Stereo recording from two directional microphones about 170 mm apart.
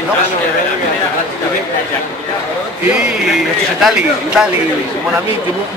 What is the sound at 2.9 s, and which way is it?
Speech, 5° right (ahead or behind).